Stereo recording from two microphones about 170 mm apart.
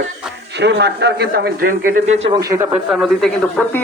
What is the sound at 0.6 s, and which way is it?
A man's voice, 85° right.